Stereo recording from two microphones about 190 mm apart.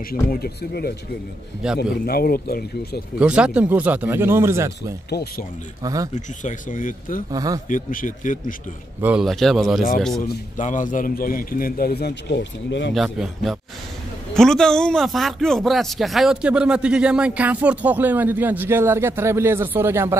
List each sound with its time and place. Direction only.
0.1 s a man's voice: 50° left (ahead or behind)
3.2 s speech: 5° right (ahead or behind)
6.1 s a man's voice: 40° left (ahead or behind)
7.2 s speech: 20° right (ahead or behind)
7.6 s a man's voice: 45° left (ahead or behind)
9.0 s speech: centre (ahead or behind)
10.2 s a man's voice: 40° left (ahead or behind); by 12.9 s 70° left (ahead or behind)
12.9 s speech: centre (ahead or behind)